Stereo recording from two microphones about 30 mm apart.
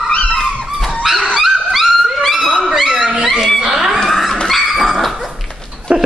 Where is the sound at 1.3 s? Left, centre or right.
Centre.